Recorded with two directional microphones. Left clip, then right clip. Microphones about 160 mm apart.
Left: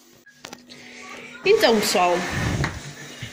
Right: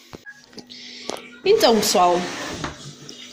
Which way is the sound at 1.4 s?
10° right (ahead or behind).